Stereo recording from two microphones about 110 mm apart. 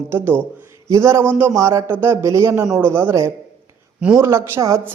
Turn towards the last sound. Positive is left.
turn(degrees=-25)  # may be behind; listen again after turning